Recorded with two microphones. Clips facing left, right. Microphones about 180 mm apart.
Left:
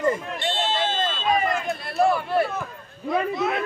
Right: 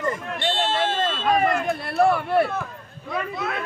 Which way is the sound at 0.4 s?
65° right (ahead or behind).